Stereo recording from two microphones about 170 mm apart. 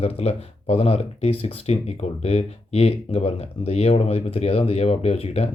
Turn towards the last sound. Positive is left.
turn(degrees=35)  # may be behind; listen again after turning